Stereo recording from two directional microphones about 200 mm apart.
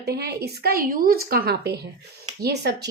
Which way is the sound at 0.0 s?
55° right (ahead or behind).